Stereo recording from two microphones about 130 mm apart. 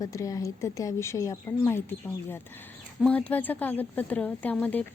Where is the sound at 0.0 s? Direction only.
25° left (ahead or behind).